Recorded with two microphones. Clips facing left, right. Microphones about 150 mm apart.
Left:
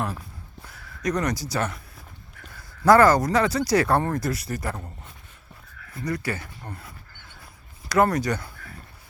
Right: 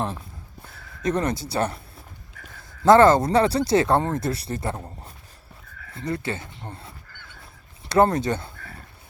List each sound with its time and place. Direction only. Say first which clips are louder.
1.0 s speech: right 2 dB; 25° right (ahead or behind)
2.8 s speech: right 2 dB; 25° right (ahead or behind)
5.7 s a sound: right 2 dB; 55° right (ahead or behind)
6.0 s speech: even; 25° right (ahead or behind)